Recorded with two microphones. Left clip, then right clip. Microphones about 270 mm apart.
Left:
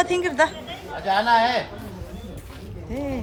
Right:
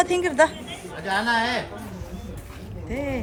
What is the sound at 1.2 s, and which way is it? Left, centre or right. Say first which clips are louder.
Speech: left 5 dB; centre.